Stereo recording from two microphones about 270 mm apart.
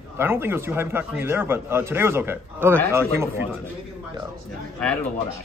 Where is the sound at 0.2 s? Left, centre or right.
Centre.